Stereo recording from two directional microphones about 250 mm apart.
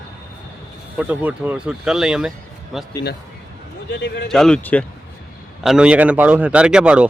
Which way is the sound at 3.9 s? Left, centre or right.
Left.